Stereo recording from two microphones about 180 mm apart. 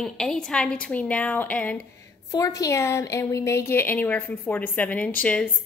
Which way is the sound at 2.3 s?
20° left (ahead or behind).